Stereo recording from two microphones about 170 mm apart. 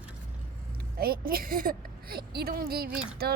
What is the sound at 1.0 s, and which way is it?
A woman's voice, 60° right (ahead or behind).